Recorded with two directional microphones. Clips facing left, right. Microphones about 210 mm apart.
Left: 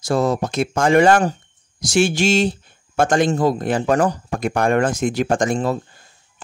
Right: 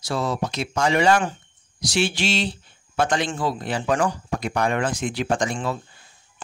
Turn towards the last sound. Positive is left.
turn(degrees=45)  # may be behind; listen again after turning